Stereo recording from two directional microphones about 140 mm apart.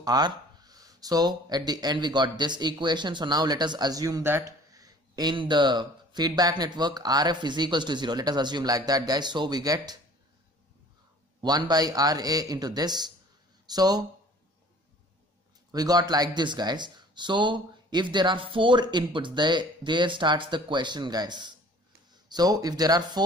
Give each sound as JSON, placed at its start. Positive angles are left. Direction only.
{"t": 0.0, "sound": "speech", "side_deg": -30}
{"t": 11.4, "sound": "speech", "side_deg": -30}
{"t": 15.7, "sound": "speech", "side_deg": -25}